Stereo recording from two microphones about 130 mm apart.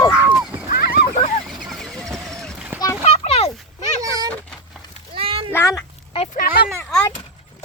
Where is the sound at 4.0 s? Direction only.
25° right (ahead or behind).